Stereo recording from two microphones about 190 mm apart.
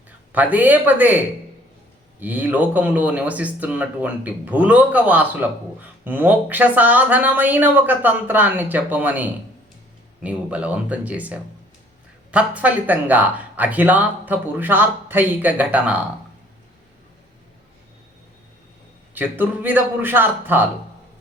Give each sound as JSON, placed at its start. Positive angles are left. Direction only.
{"t": 0.3, "sound": "speech", "side_deg": -10}
{"t": 2.2, "sound": "speech", "side_deg": -10}
{"t": 19.1, "sound": "speech", "side_deg": -10}